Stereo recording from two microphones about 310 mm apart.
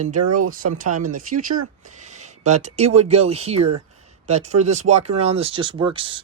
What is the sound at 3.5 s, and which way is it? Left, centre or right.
Speech, right.